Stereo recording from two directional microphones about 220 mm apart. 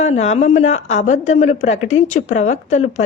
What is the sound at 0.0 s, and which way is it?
Speech, 30° left (ahead or behind).